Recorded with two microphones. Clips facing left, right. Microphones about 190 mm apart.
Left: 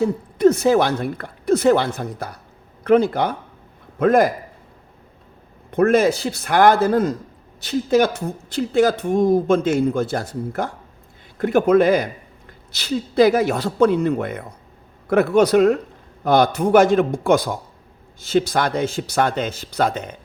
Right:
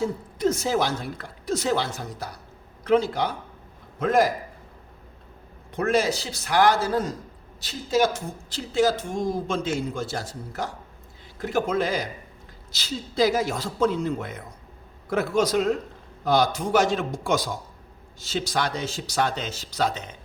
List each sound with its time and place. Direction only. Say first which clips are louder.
0.0 s a man's voice: left 9 dB; 65° left (ahead or behind)
5.7 s speech: left 7 dB; 55° left (ahead or behind)